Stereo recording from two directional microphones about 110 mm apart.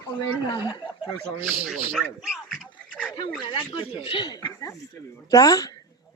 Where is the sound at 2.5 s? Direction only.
10° left (ahead or behind).